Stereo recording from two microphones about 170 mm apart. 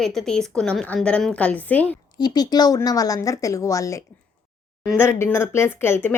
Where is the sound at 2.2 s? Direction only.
25° left (ahead or behind).